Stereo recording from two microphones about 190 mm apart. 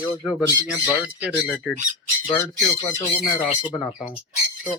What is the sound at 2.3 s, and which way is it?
Speech, 15° left (ahead or behind).